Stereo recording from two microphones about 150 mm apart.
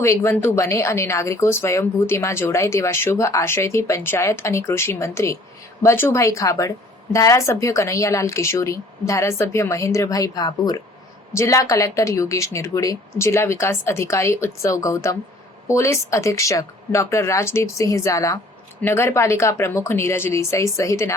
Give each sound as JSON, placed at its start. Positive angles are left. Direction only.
{"t": 0.0, "sound": "a woman's voice", "side_deg": 20}